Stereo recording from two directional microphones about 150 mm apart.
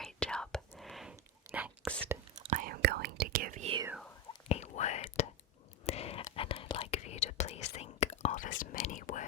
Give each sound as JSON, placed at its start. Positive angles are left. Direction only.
{"t": 0.0, "sound": "whispering", "side_deg": 5}
{"t": 0.8, "sound": "a sound", "side_deg": 0}
{"t": 1.1, "sound": "whispering", "side_deg": -15}
{"t": 2.5, "sound": "whispering", "side_deg": -70}
{"t": 4.4, "sound": "whispering", "side_deg": 45}